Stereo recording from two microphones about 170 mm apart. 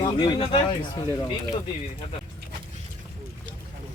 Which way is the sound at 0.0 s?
25° left (ahead or behind).